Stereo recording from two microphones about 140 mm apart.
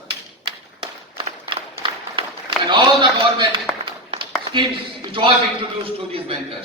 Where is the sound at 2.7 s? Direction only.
35° right (ahead or behind).